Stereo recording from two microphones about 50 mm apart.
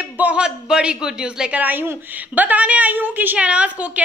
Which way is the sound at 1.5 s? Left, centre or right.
Right.